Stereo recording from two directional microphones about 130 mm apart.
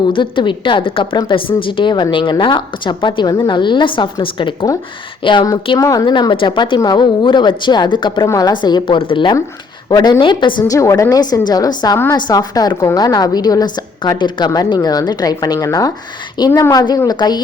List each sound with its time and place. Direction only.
0.1 s a woman's voice: 40° left (ahead or behind)
5.8 s a woman's voice: 25° left (ahead or behind)
6.1 s a woman's voice: 35° left (ahead or behind)
10.7 s a woman's voice: 25° left (ahead or behind)